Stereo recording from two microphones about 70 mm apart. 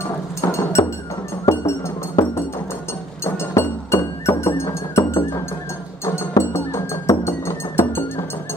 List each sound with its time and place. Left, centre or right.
0.4 s music: left